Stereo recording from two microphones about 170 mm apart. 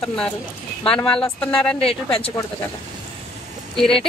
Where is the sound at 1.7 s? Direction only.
35° left (ahead or behind).